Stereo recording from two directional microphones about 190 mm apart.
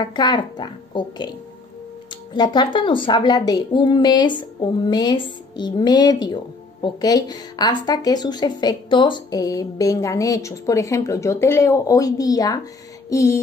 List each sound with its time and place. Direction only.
0.0 s a woman's voice: 20° left (ahead or behind)
2.3 s a woman's voice: 20° left (ahead or behind)